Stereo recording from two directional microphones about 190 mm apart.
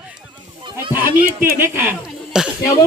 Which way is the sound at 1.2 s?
50° right (ahead or behind).